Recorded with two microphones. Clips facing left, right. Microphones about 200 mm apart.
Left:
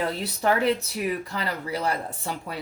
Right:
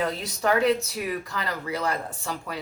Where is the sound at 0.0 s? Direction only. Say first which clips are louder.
Left 1 dB; 30° left (ahead or behind).